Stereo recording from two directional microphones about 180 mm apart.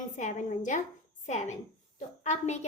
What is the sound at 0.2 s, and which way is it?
A woman's voice, 45° left (ahead or behind).